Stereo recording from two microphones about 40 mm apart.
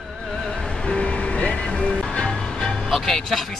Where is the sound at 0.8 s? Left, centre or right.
Left.